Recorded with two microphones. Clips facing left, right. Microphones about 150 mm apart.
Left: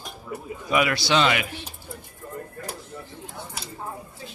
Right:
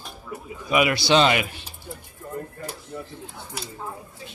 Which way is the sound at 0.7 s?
10° right (ahead or behind).